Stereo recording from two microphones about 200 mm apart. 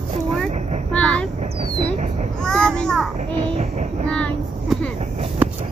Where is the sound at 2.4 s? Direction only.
5° left (ahead or behind).